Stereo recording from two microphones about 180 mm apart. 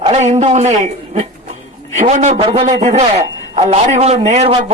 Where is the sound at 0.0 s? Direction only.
40° right (ahead or behind).